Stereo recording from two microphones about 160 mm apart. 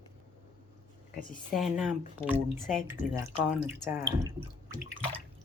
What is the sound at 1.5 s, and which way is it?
Speech, centre (ahead or behind).